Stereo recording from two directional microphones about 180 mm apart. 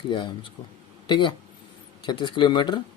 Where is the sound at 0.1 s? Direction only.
25° left (ahead or behind).